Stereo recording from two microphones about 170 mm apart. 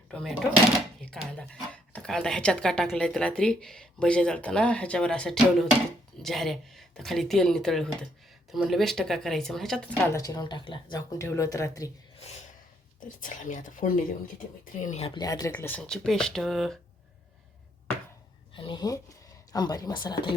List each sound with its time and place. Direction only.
0.1 s speech: 5° left (ahead or behind)
10.1 s speech: 20° left (ahead or behind)
13.1 s speech: 50° left (ahead or behind)
15.1 s speech: 20° left (ahead or behind)
15.5 s speech: 10° left (ahead or behind)
18.5 s speech: 30° left (ahead or behind)